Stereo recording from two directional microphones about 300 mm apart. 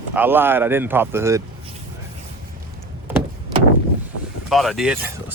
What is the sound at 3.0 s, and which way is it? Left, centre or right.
Vehicle, centre.